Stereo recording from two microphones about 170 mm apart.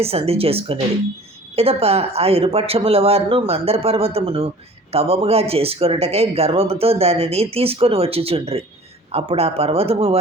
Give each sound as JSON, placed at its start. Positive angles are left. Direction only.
{"t": 0.0, "sound": "speech", "side_deg": -35}